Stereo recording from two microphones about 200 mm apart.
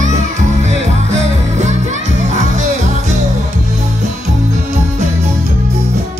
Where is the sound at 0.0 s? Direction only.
35° right (ahead or behind).